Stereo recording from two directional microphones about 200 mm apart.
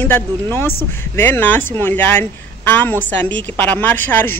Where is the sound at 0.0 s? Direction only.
10° left (ahead or behind).